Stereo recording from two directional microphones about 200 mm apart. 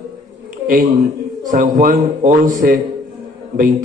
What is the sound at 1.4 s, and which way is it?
A man's voice, 40° right (ahead or behind).